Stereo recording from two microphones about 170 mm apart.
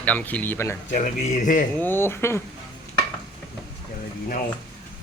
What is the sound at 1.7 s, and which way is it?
Speech, 10° left (ahead or behind).